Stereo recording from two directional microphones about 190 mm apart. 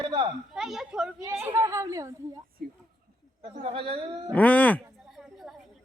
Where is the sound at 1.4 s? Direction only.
15° right (ahead or behind).